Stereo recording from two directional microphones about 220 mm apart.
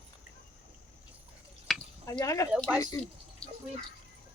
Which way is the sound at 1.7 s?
Centre (ahead or behind).